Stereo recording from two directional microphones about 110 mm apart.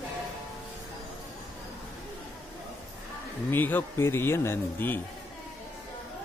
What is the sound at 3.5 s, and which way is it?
A man's voice, 15° left (ahead or behind).